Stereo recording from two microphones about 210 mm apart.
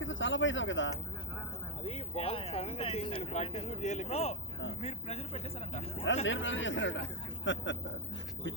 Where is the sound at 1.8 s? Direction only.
30° left (ahead or behind).